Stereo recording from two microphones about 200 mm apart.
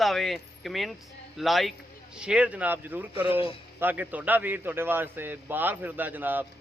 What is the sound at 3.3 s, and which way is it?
Speech, 25° left (ahead or behind).